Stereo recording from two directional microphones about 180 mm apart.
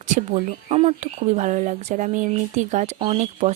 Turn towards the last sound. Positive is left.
turn(degrees=-35)  # may be behind; listen again after turning